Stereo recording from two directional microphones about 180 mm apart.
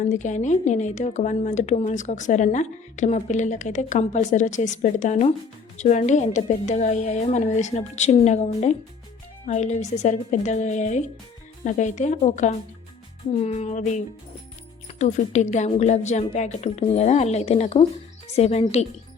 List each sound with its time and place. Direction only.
0.0 s speech: 40° left (ahead or behind)